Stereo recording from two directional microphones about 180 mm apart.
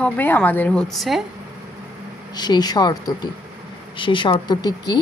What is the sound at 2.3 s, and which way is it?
Speech, 25° left (ahead or behind).